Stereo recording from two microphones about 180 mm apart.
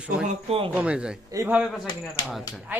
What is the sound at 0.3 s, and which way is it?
Speech, 35° right (ahead or behind).